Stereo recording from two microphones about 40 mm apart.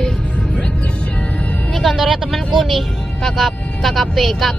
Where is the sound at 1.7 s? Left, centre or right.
Centre.